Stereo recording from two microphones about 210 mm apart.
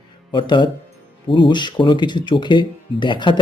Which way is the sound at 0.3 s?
20° left (ahead or behind).